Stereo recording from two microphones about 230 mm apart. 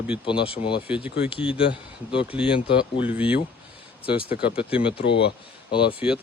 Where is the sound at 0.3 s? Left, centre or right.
Left.